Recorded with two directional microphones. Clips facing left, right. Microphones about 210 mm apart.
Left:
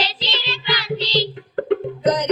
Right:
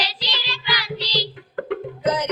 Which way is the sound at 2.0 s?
5° right (ahead or behind).